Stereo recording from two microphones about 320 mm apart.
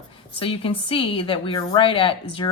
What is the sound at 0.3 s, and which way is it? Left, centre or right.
A woman's voice, centre.